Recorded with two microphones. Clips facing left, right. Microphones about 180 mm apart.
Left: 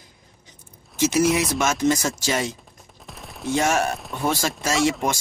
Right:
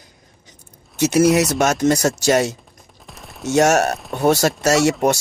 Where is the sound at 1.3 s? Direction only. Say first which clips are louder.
Right 6 dB; 75° right (ahead or behind).